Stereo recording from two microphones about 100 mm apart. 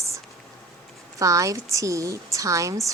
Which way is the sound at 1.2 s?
35° right (ahead or behind).